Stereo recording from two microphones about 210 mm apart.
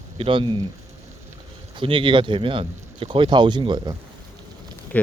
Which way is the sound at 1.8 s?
25° right (ahead or behind).